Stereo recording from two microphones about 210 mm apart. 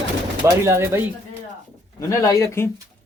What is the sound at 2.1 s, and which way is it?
Speech, 15° left (ahead or behind).